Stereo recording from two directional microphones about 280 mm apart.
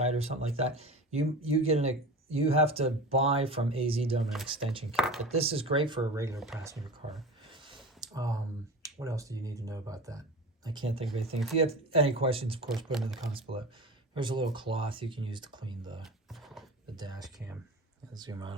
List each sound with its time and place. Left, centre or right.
0.0 s speech: right
4.2 s speech: centre
4.7 s speech: centre
4.9 s speech: centre
5.3 s speech: right; by 7.2 s centre
7.5 s clicking: centre
8.0 s a sound: centre
8.8 s speech: centre
12.7 s speech: centre
14.1 s speech: centre
16.3 s a sound: centre
16.9 s speech: centre